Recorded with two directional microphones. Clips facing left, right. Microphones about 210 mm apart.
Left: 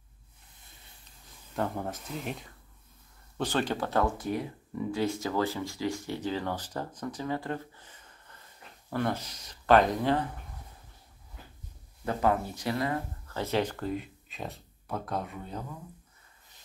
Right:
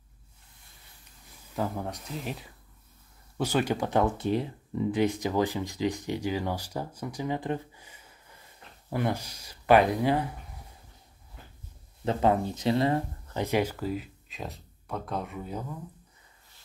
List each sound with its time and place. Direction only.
1.5 s speech: centre (ahead or behind)
12.0 s speech: 25° right (ahead or behind)
13.4 s speech: 10° right (ahead or behind)